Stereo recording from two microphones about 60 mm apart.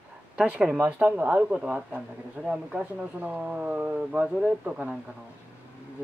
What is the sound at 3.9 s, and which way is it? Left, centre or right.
Speech, centre.